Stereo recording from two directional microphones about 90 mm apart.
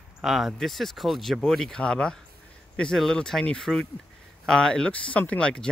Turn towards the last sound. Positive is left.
turn(degrees=10)  # may be behind; listen again after turning